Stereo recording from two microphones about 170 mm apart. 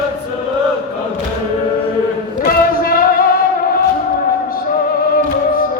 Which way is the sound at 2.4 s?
60° left (ahead or behind).